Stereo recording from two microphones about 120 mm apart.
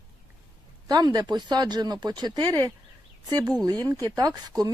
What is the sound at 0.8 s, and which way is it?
Speech, 35° right (ahead or behind).